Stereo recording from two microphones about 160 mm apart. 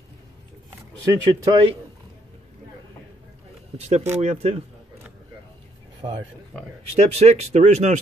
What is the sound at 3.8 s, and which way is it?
Speech, 45° right (ahead or behind).